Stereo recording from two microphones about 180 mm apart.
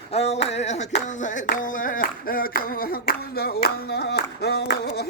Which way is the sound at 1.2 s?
50° left (ahead or behind).